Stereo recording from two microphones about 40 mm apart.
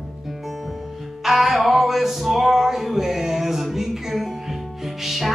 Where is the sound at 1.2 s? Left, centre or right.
Centre.